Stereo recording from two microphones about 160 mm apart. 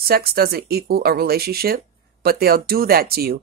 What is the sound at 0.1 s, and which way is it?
Speech, 70° right (ahead or behind).